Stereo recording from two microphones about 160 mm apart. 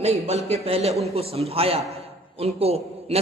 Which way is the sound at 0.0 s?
40° right (ahead or behind).